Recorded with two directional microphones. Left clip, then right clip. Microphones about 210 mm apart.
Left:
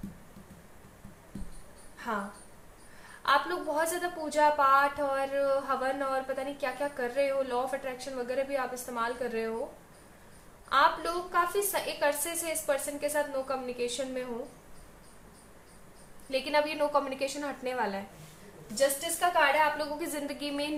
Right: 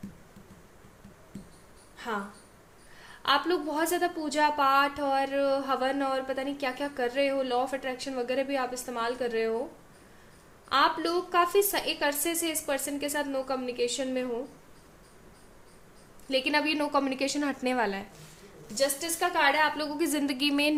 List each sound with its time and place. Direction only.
3.2 s a woman's voice: 50° right (ahead or behind)
10.7 s a woman's voice: 50° right (ahead or behind)
16.3 s a woman's voice: 50° right (ahead or behind)
19.2 s a woman's voice: 45° right (ahead or behind)